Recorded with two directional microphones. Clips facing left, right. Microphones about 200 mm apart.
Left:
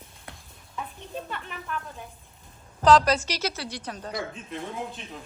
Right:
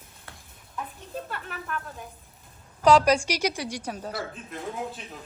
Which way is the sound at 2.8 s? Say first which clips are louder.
Right 1 dB; 10° right (ahead or behind).